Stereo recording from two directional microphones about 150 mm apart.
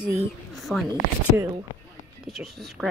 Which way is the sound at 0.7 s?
5° right (ahead or behind).